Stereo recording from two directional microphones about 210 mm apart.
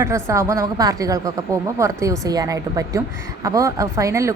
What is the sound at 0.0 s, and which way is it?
Speech, 15° right (ahead or behind).